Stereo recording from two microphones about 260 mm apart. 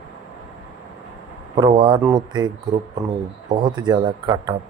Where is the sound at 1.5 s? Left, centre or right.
Centre.